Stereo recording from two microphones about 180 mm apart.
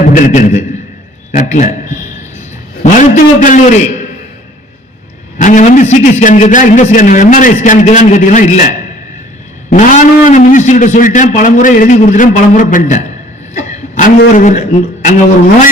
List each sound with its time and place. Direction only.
0.0 s a man's voice: 45° left (ahead or behind)
2.8 s a man's voice: 45° left (ahead or behind)
5.4 s a man's voice: 45° left (ahead or behind)
13.6 s vehicle: 45° left (ahead or behind)
14.2 s a man's voice: 45° left (ahead or behind)